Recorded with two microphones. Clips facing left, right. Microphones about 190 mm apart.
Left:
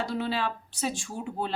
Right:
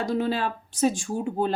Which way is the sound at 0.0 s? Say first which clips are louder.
Right 4 dB; 45° right (ahead or behind).